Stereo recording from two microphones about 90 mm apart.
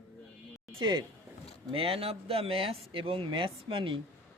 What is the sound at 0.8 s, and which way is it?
Speech, 55° right (ahead or behind).